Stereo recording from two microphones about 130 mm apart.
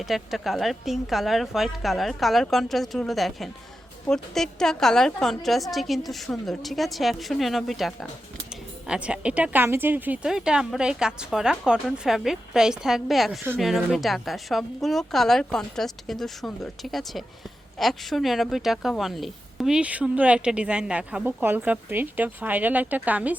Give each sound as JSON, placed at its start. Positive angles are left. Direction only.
{"t": 0.0, "sound": "a woman's voice", "side_deg": 0}